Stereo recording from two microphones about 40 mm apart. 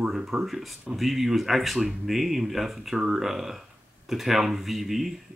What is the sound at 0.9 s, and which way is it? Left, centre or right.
Speech, centre.